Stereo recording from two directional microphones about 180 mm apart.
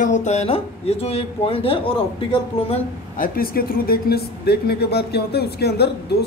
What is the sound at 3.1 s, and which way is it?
Speech, 50° left (ahead or behind).